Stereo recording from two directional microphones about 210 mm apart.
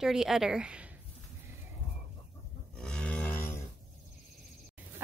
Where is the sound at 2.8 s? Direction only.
5° left (ahead or behind).